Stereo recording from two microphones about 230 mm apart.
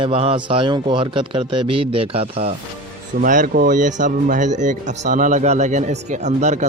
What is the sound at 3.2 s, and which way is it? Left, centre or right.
Speech, right.